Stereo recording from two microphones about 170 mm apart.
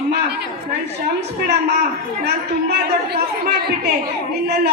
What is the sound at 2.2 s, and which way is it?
A man's voice, 70° right (ahead or behind).